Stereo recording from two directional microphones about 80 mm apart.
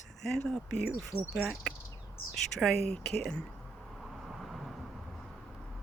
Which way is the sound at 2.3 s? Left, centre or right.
Centre.